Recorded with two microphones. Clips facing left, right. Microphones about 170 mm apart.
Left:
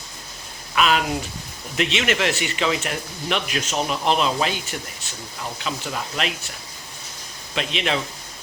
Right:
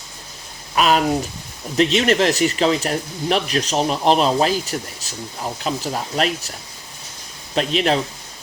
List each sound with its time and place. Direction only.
0.8 s speech: 40° right (ahead or behind)
7.5 s speech: 40° right (ahead or behind)